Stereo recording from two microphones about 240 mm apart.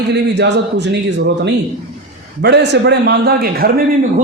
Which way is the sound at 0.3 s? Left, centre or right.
Right.